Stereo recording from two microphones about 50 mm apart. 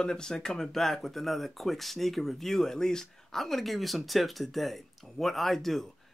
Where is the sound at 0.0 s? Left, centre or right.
Centre.